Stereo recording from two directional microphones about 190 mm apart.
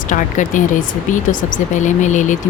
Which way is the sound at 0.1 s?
40° left (ahead or behind).